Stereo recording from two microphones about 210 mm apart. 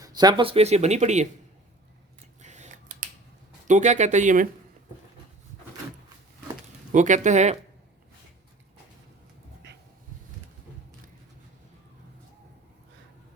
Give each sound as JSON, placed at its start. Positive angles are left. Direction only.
{"t": 0.0, "sound": "speech", "side_deg": -20}
{"t": 2.4, "sound": "scissors", "side_deg": -35}
{"t": 3.7, "sound": "speech", "side_deg": -35}
{"t": 6.9, "sound": "speech", "side_deg": -35}